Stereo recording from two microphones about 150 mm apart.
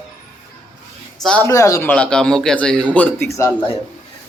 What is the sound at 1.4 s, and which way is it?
Speech, 20° left (ahead or behind).